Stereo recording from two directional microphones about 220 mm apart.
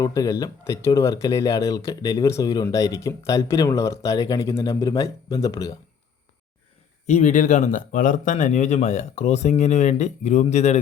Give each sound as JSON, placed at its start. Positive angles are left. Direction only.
{"t": 0.0, "sound": "speech", "side_deg": 15}
{"t": 7.1, "sound": "speech", "side_deg": 30}